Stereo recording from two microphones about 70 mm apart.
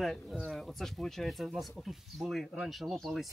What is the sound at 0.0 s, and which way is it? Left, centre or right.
Speech, centre.